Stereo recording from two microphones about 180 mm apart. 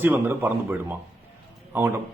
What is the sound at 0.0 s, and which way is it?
A man's voice, 10° right (ahead or behind).